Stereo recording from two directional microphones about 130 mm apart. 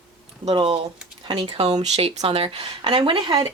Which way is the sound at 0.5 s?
45° right (ahead or behind).